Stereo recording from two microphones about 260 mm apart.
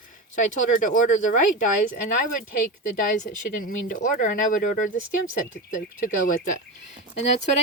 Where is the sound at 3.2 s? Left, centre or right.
Left.